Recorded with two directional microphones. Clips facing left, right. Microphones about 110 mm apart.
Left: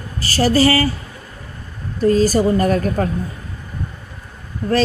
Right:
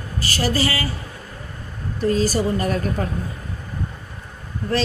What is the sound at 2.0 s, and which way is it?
Mantra, 45° left (ahead or behind).